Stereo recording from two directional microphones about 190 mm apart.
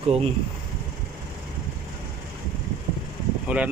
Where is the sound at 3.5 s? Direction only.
5° right (ahead or behind).